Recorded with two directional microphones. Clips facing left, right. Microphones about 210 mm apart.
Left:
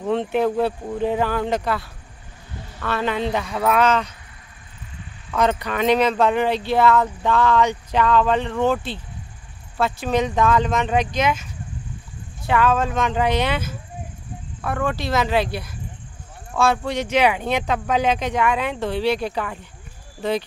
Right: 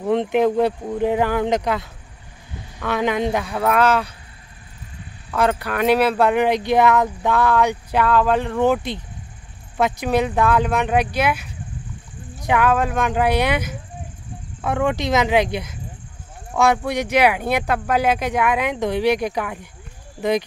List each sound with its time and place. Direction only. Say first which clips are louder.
0.0 s speech: right 3 dB; 15° right (ahead or behind)
5.3 s speech: right 1 dB; 5° right (ahead or behind)